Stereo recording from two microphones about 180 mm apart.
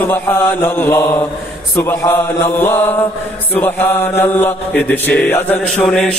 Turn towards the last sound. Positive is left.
turn(degrees=5)  # may be behind; listen again after turning